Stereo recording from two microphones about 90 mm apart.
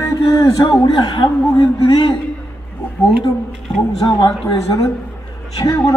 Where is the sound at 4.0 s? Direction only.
45° left (ahead or behind).